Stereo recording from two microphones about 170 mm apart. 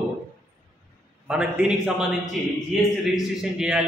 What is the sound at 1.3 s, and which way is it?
A man's voice, 5° right (ahead or behind).